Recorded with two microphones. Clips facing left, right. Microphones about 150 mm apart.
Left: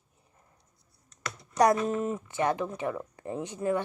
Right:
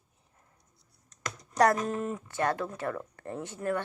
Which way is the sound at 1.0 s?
45° right (ahead or behind).